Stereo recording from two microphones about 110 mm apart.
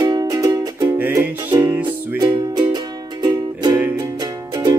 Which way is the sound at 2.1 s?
40° right (ahead or behind).